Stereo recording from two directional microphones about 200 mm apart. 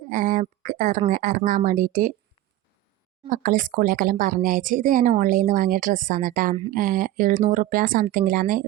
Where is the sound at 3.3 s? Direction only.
40° right (ahead or behind).